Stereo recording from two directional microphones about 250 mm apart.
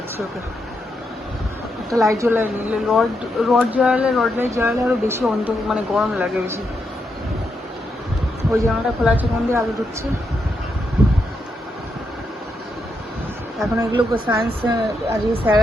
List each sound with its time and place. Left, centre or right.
1.9 s speech: centre
8.5 s speech: centre
13.7 s speech: centre